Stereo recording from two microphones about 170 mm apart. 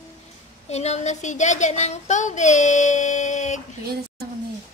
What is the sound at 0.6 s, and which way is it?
A woman's voice, 40° left (ahead or behind).